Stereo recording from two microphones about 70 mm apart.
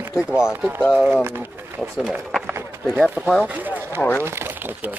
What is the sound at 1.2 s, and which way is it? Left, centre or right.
Speech, right.